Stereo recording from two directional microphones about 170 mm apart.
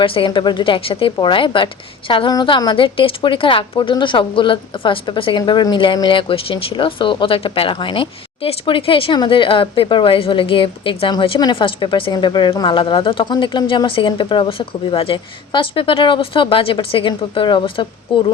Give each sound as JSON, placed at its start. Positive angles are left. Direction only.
{"t": 0.0, "sound": "speech", "side_deg": 30}